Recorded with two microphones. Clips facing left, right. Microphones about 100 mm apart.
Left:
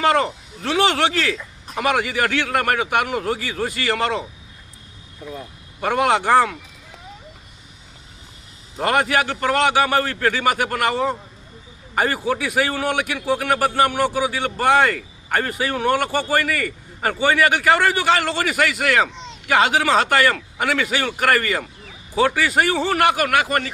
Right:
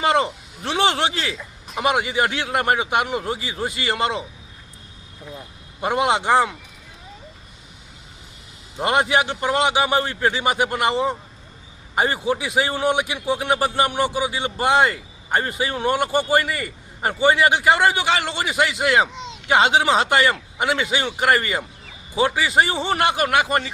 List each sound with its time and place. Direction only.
0.0 s a man's voice: 25° right (ahead or behind)
5.8 s a man's voice: 20° right (ahead or behind)
8.8 s a man's voice: 20° right (ahead or behind)